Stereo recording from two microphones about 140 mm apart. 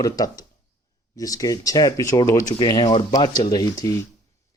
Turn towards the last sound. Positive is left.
turn(degrees=25)  # may be behind; listen again after turning